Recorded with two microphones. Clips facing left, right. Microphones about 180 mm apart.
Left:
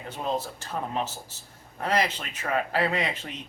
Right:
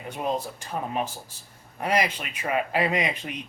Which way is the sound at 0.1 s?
15° right (ahead or behind).